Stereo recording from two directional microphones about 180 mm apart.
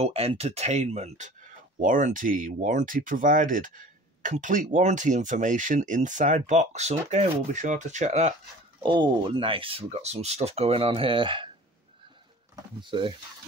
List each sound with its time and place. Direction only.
0.0 s speech: 35° right (ahead or behind)
8.8 s speech: 25° right (ahead or behind)
12.5 s speech: 25° right (ahead or behind)